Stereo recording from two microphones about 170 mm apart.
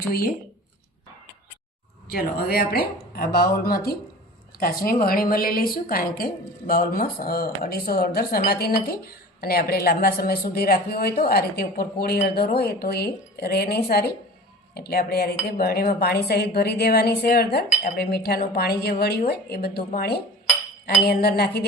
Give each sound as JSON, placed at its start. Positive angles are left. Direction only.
{"t": 2.0, "sound": "a woman's voice", "side_deg": 65}